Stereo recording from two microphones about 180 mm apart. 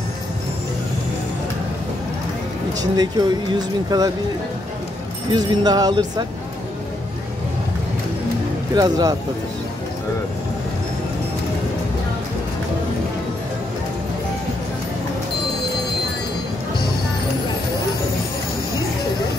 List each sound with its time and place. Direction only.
2.8 s speech: 20° right (ahead or behind)
5.3 s speech: 20° right (ahead or behind)
8.7 s speech: 20° right (ahead or behind)